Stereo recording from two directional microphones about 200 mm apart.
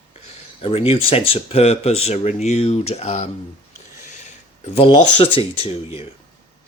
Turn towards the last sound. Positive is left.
turn(degrees=30)  # may be behind; listen again after turning